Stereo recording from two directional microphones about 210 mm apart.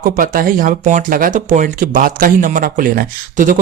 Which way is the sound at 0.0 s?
40° right (ahead or behind).